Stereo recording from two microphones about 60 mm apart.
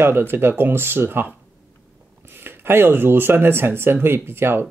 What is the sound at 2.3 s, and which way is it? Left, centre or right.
Speech, right.